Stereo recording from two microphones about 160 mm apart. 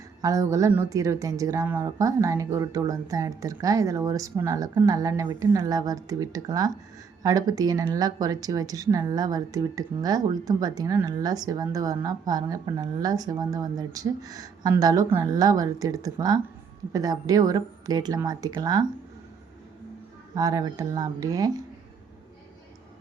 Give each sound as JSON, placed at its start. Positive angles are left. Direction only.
{"t": 0.2, "sound": "speech", "side_deg": -20}
{"t": 20.3, "sound": "speech", "side_deg": -20}